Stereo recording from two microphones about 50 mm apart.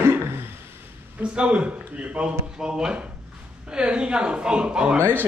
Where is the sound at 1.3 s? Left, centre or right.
Right.